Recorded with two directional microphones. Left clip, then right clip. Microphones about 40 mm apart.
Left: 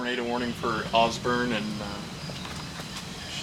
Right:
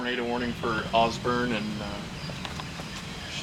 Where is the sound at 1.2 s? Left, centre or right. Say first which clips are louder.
Left 1 dB; left.